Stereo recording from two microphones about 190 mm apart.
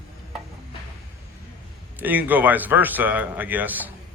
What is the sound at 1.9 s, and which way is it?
A man's voice, 10° right (ahead or behind).